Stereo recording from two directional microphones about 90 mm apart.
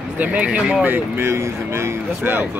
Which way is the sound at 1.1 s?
30° right (ahead or behind).